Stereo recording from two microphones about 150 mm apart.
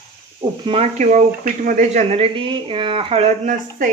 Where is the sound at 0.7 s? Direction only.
45° right (ahead or behind).